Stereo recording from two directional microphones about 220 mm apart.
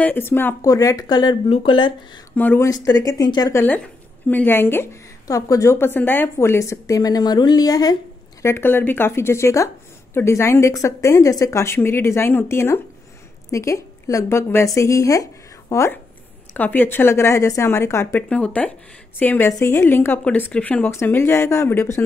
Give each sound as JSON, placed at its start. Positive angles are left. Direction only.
{"t": 0.0, "sound": "a woman's voice", "side_deg": 10}
{"t": 2.3, "sound": "a woman's voice", "side_deg": 10}